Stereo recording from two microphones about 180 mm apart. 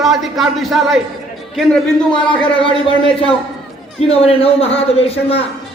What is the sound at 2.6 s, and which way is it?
A man's voice, 30° left (ahead or behind).